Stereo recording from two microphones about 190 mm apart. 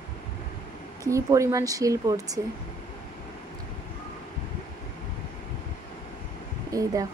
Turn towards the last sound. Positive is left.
turn(degrees=-20)  # may be behind; listen again after turning